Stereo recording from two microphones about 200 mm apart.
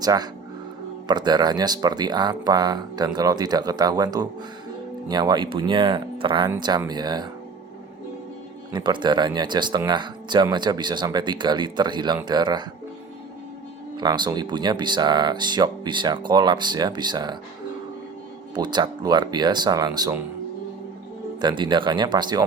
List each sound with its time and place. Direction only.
0.0 s speech: 20° right (ahead or behind)
8.7 s speech: 20° right (ahead or behind)
13.9 s speech: 20° right (ahead or behind)
18.5 s speech: 20° right (ahead or behind)
21.4 s speech: 25° right (ahead or behind)